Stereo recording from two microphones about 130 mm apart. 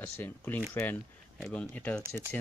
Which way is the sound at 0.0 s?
15° left (ahead or behind).